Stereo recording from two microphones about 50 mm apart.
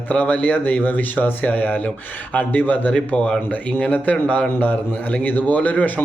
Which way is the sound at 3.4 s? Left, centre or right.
Left.